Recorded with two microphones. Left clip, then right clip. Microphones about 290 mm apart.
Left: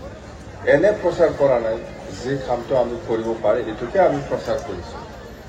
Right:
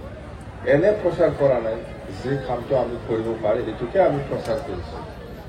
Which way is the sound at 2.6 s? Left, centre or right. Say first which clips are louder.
Left 1 dB; left.